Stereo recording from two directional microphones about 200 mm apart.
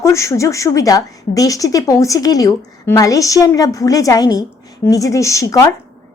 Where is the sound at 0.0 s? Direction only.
15° left (ahead or behind).